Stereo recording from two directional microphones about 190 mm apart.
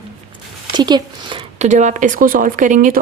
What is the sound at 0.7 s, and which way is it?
Speech, 20° right (ahead or behind).